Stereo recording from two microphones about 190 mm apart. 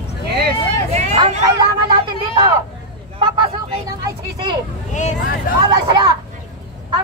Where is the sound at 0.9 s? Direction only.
35° right (ahead or behind).